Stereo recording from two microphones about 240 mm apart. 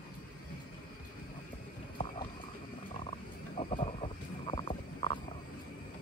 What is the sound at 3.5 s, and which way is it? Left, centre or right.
Wild animals, left.